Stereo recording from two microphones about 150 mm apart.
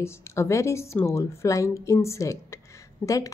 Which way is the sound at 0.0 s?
20° left (ahead or behind).